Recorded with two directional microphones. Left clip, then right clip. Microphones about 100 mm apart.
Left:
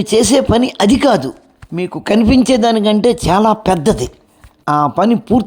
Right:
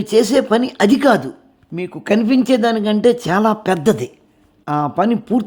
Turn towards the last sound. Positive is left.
turn(degrees=20)  # may be behind; listen again after turning